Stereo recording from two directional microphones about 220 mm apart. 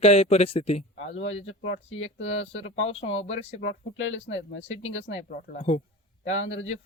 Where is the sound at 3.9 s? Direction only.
60° left (ahead or behind).